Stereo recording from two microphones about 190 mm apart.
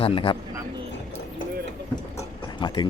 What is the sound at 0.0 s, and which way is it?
Speech, 30° left (ahead or behind).